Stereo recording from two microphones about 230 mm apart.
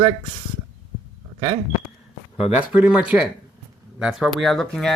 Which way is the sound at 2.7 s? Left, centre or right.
Centre.